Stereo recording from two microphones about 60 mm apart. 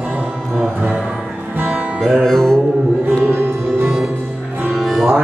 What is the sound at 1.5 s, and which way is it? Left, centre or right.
Music, right.